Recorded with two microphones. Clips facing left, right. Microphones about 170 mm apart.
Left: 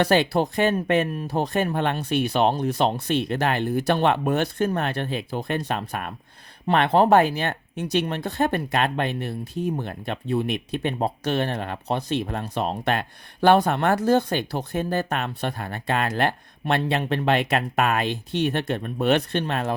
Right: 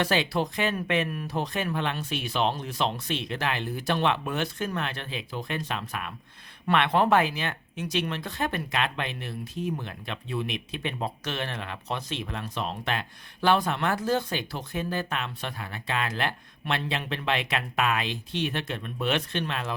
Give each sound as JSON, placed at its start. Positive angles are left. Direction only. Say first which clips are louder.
{"t": 0.1, "sound": "speech", "louder": "left 6 dB", "side_deg": 45}